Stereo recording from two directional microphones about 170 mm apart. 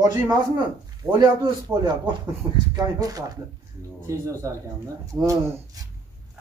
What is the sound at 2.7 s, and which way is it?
Speech, 20° right (ahead or behind).